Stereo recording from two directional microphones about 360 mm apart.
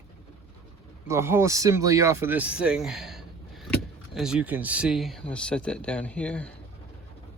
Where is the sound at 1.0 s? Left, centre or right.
Centre.